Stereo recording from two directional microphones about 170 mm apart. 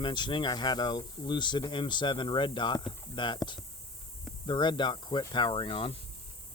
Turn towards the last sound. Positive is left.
turn(degrees=30)  # may be behind; listen again after turning